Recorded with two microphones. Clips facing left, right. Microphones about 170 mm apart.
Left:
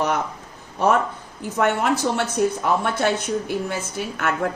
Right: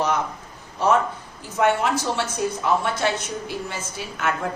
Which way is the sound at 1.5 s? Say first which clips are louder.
Even; 55° left (ahead or behind).